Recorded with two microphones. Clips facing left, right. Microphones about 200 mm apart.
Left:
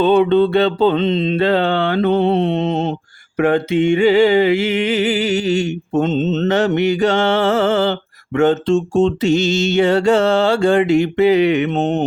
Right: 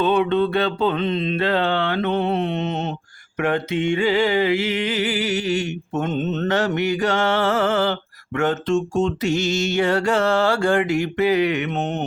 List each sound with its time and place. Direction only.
0.0 s mantra: 30° left (ahead or behind)